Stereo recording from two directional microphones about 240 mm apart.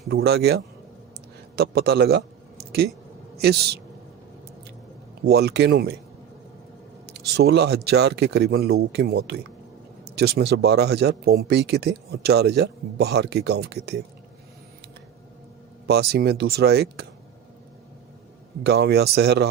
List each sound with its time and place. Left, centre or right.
0.1 s a man's voice: right
5.2 s speech: right
7.1 s speech: right
15.9 s speech: right
18.6 s speech: right